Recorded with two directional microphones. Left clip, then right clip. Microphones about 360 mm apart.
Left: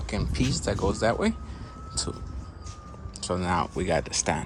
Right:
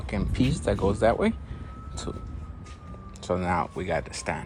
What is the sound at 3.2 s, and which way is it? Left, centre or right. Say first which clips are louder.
Speech: right 1 dB; centre.